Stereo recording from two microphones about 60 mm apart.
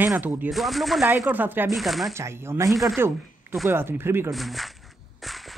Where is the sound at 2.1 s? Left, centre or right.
Right.